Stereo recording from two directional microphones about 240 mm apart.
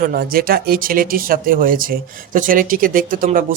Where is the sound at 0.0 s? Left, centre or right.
Right.